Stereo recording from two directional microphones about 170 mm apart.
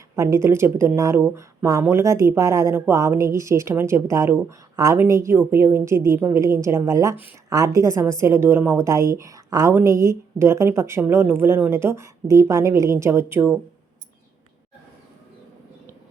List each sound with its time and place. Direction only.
0.2 s a woman's voice: 15° right (ahead or behind)